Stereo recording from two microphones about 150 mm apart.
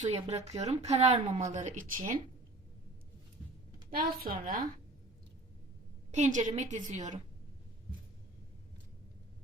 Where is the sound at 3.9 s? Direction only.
75° right (ahead or behind).